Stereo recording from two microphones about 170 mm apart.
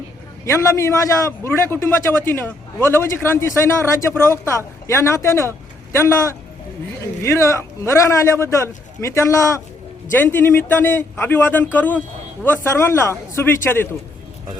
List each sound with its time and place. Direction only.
0.4 s a man's voice: 15° left (ahead or behind)